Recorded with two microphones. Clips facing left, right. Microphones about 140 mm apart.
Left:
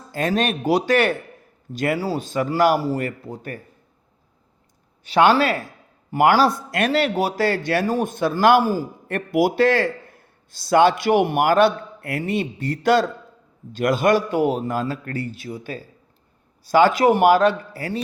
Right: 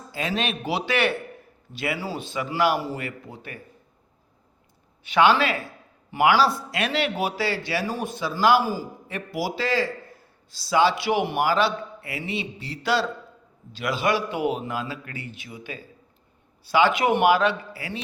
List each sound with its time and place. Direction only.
0.1 s a man's voice: 45° left (ahead or behind)
5.0 s a man's voice: 40° left (ahead or behind)